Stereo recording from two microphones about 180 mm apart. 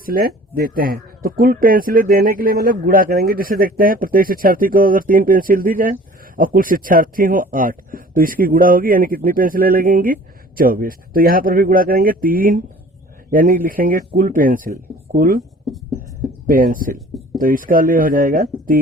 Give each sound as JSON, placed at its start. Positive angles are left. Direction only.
{"t": 0.0, "sound": "speech", "side_deg": -50}
{"t": 16.5, "sound": "speech", "side_deg": -50}